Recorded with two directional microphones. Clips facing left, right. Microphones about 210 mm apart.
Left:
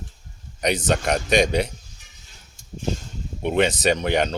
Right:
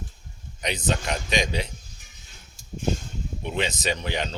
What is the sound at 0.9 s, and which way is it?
Speech, 50° left (ahead or behind).